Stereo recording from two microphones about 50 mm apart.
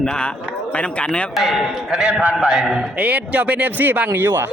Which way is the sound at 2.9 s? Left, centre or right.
Right.